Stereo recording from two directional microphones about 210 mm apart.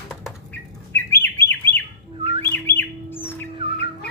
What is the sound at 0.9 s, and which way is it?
Bird, 10° left (ahead or behind).